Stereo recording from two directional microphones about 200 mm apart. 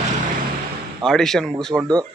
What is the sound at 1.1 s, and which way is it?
Speech, centre (ahead or behind).